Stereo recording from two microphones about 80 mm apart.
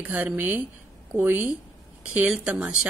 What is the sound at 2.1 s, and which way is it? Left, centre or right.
Speech, centre.